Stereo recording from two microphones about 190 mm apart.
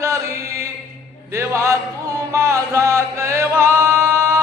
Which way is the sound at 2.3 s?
15° right (ahead or behind).